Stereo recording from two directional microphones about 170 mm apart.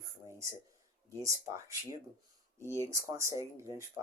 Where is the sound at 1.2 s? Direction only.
20° right (ahead or behind).